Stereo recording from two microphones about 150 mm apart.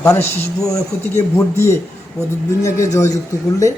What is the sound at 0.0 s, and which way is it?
Speech, 15° left (ahead or behind).